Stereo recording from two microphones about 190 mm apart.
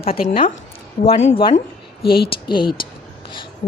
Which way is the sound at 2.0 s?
55° left (ahead or behind).